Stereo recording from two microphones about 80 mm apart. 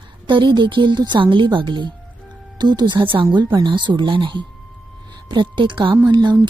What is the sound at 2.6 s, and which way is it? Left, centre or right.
A woman's voice, right.